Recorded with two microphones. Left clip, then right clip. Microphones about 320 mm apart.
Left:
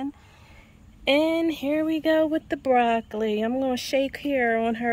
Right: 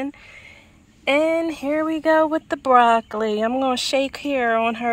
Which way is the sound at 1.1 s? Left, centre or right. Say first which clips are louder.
Right 3 dB; centre.